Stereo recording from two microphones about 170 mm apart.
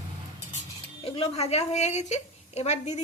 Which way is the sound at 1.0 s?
35° left (ahead or behind).